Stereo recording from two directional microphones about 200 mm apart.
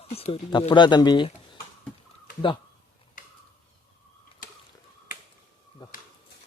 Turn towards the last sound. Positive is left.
turn(degrees=20)  # may be behind; listen again after turning